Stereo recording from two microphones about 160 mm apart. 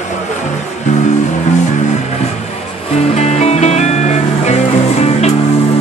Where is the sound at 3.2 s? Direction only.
45° left (ahead or behind).